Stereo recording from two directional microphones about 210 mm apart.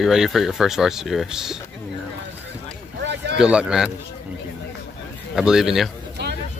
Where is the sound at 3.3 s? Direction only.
5° right (ahead or behind).